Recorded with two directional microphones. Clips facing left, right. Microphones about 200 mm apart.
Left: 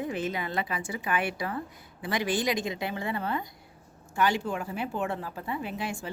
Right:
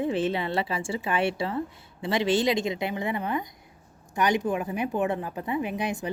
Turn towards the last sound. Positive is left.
turn(degrees=-20)  # may be behind; listen again after turning